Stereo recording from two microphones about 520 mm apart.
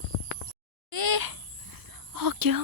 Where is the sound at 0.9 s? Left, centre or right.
Right.